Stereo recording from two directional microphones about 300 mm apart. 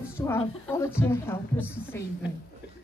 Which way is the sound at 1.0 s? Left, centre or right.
Centre.